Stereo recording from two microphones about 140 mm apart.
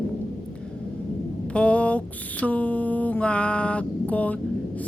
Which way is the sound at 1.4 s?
10° left (ahead or behind).